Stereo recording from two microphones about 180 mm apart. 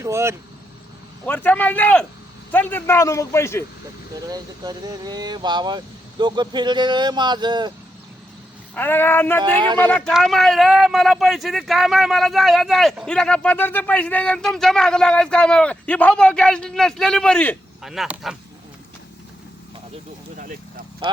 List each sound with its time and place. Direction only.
0.0 s speech: 15° right (ahead or behind)
1.2 s a man's voice: 10° left (ahead or behind)
4.1 s speech: 20° right (ahead or behind)
8.7 s a man's voice: 10° left (ahead or behind)
20.3 s vehicle: 50° right (ahead or behind)